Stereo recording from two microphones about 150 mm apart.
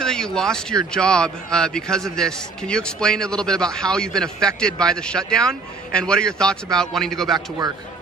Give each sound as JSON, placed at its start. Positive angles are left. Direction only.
{"t": 0.0, "sound": "a man's voice", "side_deg": 5}
{"t": 7.3, "sound": "a man's voice", "side_deg": -25}